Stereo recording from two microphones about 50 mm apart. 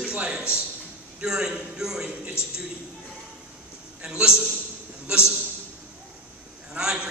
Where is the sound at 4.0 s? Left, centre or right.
Centre.